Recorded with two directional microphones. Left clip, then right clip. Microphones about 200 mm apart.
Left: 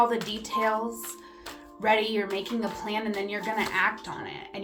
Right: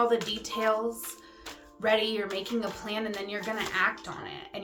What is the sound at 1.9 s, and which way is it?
A woman's voice, 15° right (ahead or behind).